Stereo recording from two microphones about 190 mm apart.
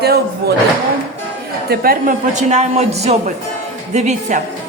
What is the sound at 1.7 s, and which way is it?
A man's voice, 50° right (ahead or behind).